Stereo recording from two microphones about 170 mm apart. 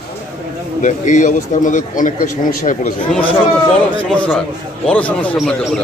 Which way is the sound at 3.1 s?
10° left (ahead or behind).